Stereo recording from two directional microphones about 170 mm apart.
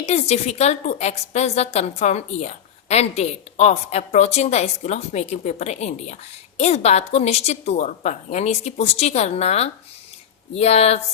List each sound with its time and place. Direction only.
0.0 s a woman's voice: 40° left (ahead or behind)